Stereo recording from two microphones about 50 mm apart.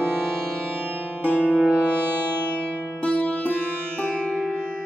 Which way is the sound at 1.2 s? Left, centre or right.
Left.